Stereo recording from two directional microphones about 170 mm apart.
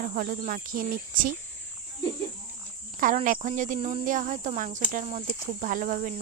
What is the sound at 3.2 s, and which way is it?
Speech, 50° right (ahead or behind).